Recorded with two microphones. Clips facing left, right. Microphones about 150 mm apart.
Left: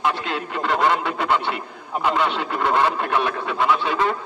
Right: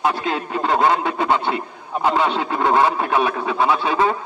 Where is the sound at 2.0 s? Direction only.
40° right (ahead or behind).